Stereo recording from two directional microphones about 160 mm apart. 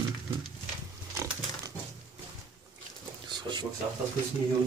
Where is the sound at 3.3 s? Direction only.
30° right (ahead or behind).